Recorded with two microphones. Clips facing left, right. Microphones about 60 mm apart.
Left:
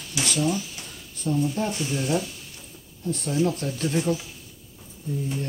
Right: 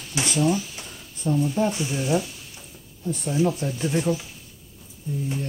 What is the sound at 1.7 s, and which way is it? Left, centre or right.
Speech, centre.